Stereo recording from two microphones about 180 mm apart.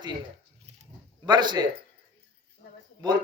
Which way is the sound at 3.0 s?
25° right (ahead or behind).